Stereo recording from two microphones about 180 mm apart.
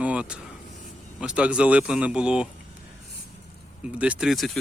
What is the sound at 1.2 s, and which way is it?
Speech, 5° right (ahead or behind).